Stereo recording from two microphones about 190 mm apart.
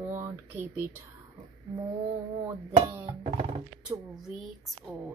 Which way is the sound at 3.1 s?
25° right (ahead or behind).